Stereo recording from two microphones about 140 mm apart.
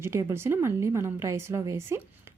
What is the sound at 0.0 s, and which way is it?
A woman's voice, 20° right (ahead or behind).